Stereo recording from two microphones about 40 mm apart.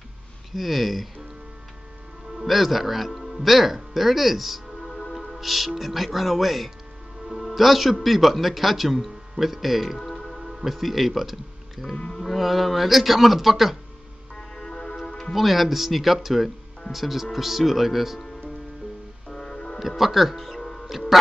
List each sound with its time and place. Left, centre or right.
0.5 s a man's voice: centre
2.3 s a man's voice: centre
14.3 s music: centre
15.3 s a man's voice: centre
19.2 s music: centre
20.0 s a man's voice: centre
21.1 s a sound: centre